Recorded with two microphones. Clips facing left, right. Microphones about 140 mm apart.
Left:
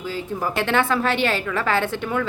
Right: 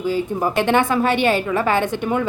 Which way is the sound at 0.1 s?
15° right (ahead or behind).